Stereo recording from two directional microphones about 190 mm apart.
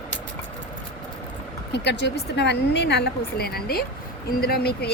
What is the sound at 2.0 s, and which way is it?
A woman's voice, 65° left (ahead or behind).